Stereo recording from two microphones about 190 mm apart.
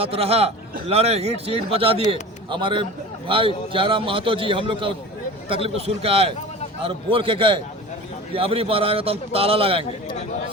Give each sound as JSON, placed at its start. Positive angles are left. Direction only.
{"t": 0.0, "sound": "a man's voice", "side_deg": -30}